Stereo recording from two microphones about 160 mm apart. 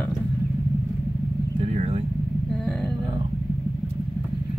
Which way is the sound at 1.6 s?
40° right (ahead or behind).